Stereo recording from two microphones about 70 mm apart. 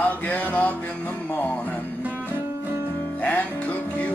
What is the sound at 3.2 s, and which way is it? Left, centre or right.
Music, left.